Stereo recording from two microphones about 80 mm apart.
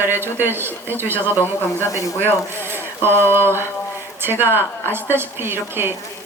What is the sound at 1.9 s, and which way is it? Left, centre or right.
Speech, left.